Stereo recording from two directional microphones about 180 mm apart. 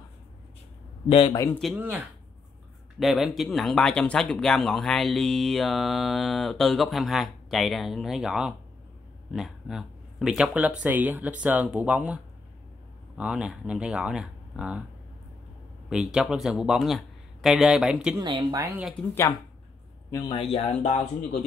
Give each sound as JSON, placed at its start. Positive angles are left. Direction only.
{"t": 1.0, "sound": "a man's voice", "side_deg": 30}
{"t": 1.8, "sound": "speech", "side_deg": -10}
{"t": 3.0, "sound": "speech", "side_deg": 0}
{"t": 13.2, "sound": "speech", "side_deg": -5}
{"t": 15.9, "sound": "speech", "side_deg": -5}
{"t": 18.2, "sound": "speech", "side_deg": -20}
{"t": 20.1, "sound": "a man's voice", "side_deg": 25}